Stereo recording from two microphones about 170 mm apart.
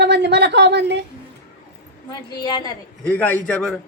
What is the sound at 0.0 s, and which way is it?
A woman's voice, 85° right.